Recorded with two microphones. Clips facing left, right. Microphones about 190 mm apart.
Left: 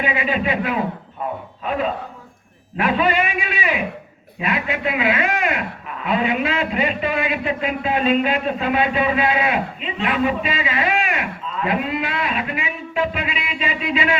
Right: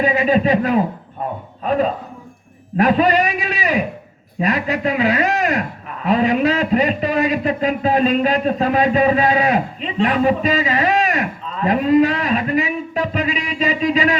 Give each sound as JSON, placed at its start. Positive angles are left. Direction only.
{"t": 0.0, "sound": "a man's voice", "side_deg": -40}
{"t": 2.7, "sound": "a man's voice", "side_deg": -40}